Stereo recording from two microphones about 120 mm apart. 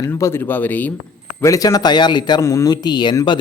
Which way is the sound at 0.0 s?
20° left (ahead or behind).